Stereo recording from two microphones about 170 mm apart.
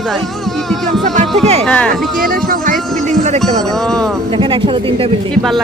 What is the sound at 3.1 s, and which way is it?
Music, 45° right (ahead or behind).